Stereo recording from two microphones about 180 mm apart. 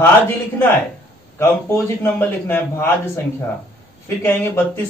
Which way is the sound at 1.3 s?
15° left (ahead or behind).